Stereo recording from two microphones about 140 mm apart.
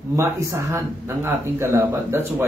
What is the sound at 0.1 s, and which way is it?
Speech, 20° right (ahead or behind).